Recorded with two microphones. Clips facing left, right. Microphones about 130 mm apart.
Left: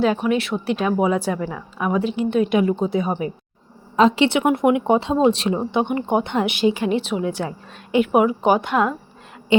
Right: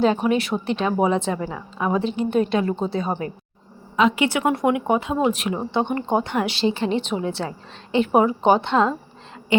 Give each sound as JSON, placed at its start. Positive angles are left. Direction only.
{"t": 0.0, "sound": "speech", "side_deg": 0}
{"t": 2.5, "sound": "a woman's voice", "side_deg": 15}
{"t": 3.9, "sound": "a woman's voice", "side_deg": 35}